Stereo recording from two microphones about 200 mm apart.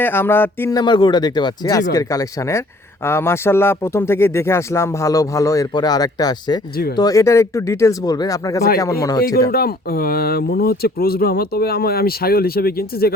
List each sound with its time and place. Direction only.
0.0 s speech: 10° left (ahead or behind)
9.5 s speech: 50° left (ahead or behind)